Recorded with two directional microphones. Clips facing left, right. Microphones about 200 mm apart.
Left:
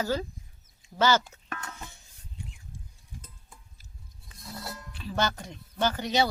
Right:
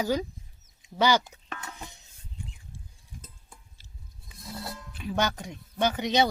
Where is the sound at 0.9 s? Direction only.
15° right (ahead or behind).